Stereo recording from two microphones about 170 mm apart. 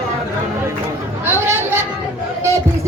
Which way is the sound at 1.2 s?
15° right (ahead or behind).